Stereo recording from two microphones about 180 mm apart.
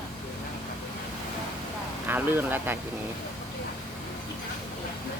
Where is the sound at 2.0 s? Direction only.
10° right (ahead or behind).